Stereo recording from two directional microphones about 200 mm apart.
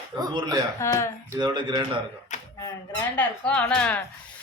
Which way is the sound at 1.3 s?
20° right (ahead or behind).